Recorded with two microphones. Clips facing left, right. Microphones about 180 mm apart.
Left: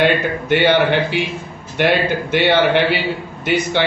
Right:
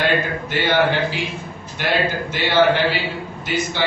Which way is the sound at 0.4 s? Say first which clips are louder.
Left 6 dB; 60° left (ahead or behind).